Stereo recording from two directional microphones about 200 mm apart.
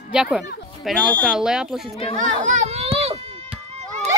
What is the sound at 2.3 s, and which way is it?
Children playing, 40° right (ahead or behind).